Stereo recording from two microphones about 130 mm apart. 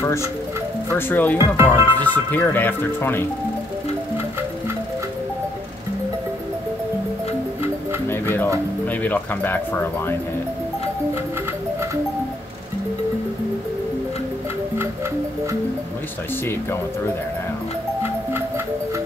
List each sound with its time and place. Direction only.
0.9 s speech: 15° left (ahead or behind)
1.4 s speech: 20° right (ahead or behind)
2.0 s speech: 15° left (ahead or behind)
8.1 s music: 15° left (ahead or behind)
8.8 s speech: 15° left (ahead or behind)